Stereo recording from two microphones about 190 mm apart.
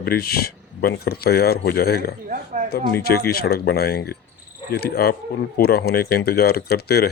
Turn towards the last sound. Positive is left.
turn(degrees=55)  # may be behind; listen again after turning